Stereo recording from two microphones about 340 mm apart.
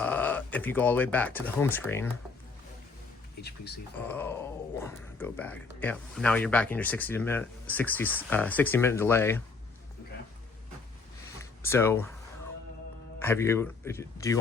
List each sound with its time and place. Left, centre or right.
0.0 s speech: centre
3.4 s speech: left
4.1 s speech: centre
11.3 s a sound: centre
13.2 s speech: centre